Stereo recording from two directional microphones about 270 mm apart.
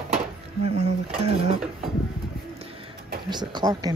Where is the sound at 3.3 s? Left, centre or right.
Centre.